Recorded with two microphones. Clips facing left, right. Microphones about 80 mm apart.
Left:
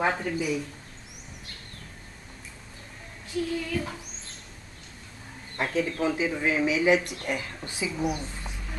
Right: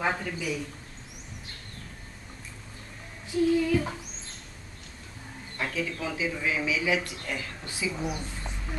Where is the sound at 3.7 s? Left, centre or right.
Centre.